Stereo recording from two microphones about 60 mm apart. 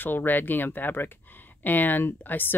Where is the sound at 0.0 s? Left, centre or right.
Left.